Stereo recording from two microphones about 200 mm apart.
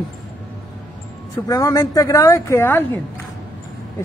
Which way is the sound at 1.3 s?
15° left (ahead or behind).